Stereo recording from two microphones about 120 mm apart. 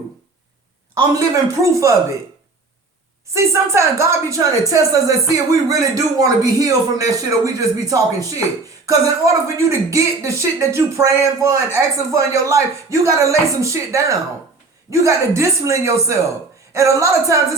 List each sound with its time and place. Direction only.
1.1 s speech: 30° right (ahead or behind)
3.3 s speech: 25° right (ahead or behind)